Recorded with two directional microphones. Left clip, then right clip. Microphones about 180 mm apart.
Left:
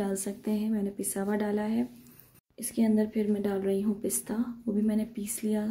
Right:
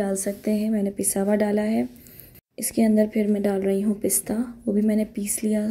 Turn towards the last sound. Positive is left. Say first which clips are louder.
# right 6 dB
turn(degrees=-15)  # may be behind; listen again after turning